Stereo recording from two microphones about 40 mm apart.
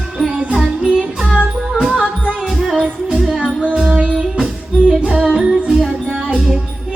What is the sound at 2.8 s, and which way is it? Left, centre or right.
Music, right.